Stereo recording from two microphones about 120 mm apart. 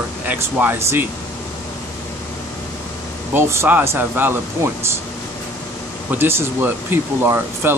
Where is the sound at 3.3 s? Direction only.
20° right (ahead or behind).